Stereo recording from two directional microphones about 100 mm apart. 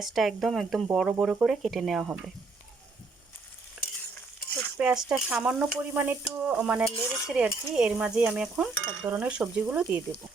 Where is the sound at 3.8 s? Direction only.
5° right (ahead or behind).